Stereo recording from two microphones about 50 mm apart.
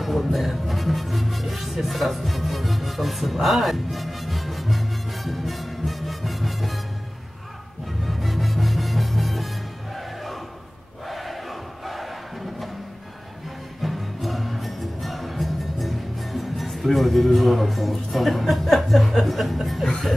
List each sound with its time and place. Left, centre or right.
0.0 s music: centre
8.0 s music: centre
9.9 s crowd: centre
11.8 s battle cry: centre
13.8 s music: centre